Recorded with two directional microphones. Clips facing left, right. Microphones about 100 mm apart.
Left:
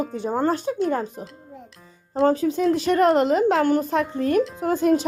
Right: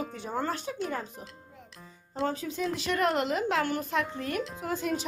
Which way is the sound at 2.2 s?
55° left (ahead or behind).